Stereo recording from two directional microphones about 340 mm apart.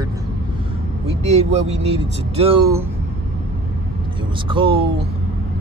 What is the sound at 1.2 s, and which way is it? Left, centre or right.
Speech, centre.